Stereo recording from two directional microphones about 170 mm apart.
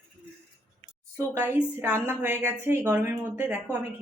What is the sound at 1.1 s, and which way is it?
Speech, 15° right (ahead or behind).